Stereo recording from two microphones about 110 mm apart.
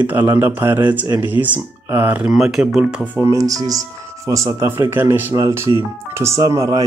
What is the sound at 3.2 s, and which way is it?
Speech, 30° right (ahead or behind).